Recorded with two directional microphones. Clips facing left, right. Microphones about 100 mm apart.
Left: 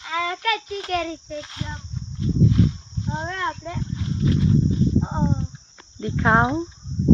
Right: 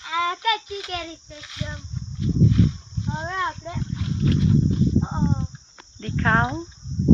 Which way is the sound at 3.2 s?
15° right (ahead or behind).